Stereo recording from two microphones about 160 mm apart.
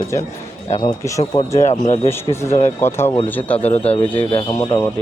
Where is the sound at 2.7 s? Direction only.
15° left (ahead or behind).